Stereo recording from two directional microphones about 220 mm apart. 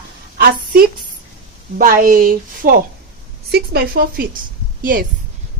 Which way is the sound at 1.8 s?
40° right (ahead or behind).